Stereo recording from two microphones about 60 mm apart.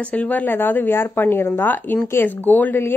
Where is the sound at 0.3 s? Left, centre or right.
Left.